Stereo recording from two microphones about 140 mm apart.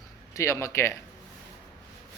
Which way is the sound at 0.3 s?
20° left (ahead or behind).